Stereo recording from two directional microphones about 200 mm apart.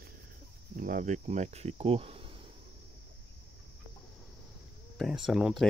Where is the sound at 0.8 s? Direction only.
40° right (ahead or behind).